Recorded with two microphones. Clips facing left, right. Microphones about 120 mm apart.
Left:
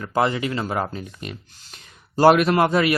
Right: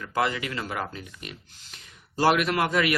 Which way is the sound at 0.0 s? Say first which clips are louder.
Left 5 dB; 30° left (ahead or behind).